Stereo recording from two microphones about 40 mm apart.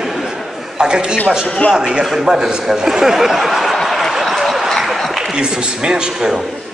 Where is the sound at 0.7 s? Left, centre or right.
Centre.